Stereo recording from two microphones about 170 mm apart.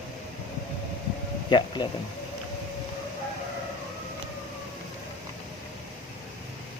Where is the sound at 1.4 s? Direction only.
25° left (ahead or behind).